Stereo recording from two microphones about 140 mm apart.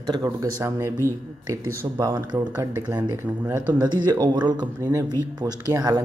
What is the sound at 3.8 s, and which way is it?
Speech, 30° right (ahead or behind).